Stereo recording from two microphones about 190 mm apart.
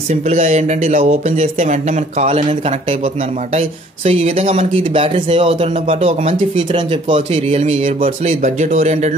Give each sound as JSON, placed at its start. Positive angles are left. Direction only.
{"t": 0.1, "sound": "speech", "side_deg": -35}
{"t": 3.5, "sound": "speech", "side_deg": -35}